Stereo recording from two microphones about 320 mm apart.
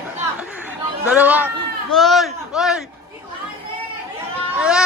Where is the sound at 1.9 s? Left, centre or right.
Centre.